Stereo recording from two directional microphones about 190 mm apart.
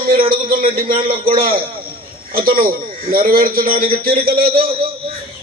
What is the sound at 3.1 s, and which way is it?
A man's voice, 50° right (ahead or behind).